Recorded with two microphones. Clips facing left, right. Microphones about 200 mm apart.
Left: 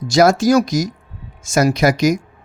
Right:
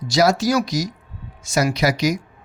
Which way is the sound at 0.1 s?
50° left (ahead or behind).